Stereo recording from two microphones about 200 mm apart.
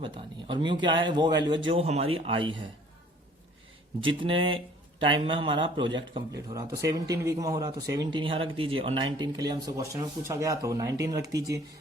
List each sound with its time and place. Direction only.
0.0 s speech: 25° right (ahead or behind)
4.0 s speech: 25° right (ahead or behind)